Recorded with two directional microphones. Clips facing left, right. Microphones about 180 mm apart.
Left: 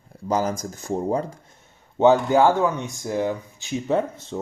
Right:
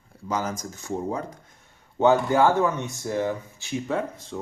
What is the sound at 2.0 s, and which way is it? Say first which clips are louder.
Speech: left 3 dB; 20° left (ahead or behind).